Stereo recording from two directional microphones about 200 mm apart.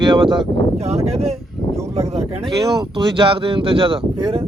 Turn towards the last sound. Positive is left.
turn(degrees=-25)  # may be behind; listen again after turning